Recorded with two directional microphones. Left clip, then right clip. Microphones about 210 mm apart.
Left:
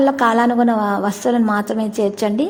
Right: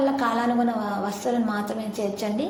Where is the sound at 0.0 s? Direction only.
45° left (ahead or behind).